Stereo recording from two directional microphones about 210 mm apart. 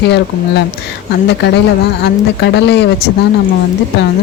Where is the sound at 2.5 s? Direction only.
55° left (ahead or behind).